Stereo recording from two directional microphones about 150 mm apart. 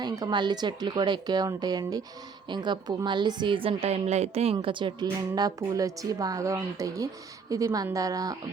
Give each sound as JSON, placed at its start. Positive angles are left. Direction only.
{"t": 0.0, "sound": "a woman's voice", "side_deg": -30}
{"t": 4.5, "sound": "a woman's voice", "side_deg": -35}